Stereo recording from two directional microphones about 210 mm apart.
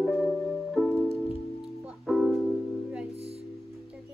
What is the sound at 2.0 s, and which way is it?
Music, centre (ahead or behind).